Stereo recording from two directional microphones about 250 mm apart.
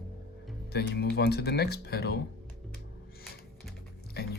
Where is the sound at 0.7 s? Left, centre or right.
Left.